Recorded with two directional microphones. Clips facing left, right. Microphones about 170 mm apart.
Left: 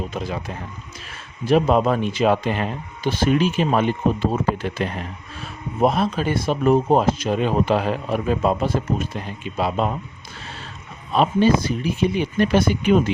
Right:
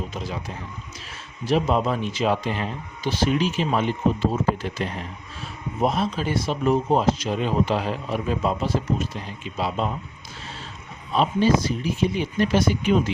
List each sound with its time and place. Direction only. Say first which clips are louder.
0.1 s speech: left 4 dB; 55° left (ahead or behind)
11.1 s speech: left 3 dB; 60° left (ahead or behind)